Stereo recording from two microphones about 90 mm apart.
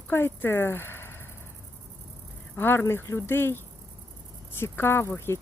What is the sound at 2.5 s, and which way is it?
Speech, 25° left (ahead or behind).